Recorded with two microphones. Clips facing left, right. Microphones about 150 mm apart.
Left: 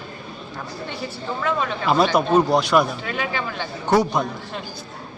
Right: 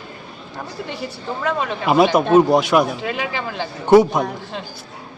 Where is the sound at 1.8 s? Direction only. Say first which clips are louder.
Right 4 dB; 5° right (ahead or behind).